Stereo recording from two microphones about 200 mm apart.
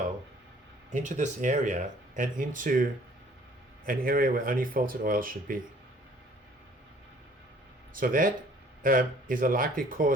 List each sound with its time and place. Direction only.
0.9 s speech: 35° right (ahead or behind)
3.8 s speech: 45° right (ahead or behind)
7.9 s speech: 45° right (ahead or behind)